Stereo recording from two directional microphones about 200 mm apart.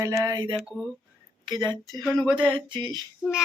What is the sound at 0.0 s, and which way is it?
Music, 15° right (ahead or behind).